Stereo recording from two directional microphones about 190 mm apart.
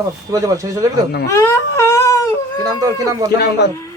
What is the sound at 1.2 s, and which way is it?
Baby cry, 15° left (ahead or behind).